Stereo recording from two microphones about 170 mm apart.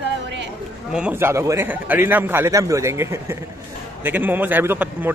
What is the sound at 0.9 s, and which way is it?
A man's voice, 10° right (ahead or behind).